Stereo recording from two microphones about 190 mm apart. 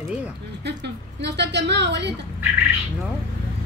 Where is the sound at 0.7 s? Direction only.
65° right (ahead or behind).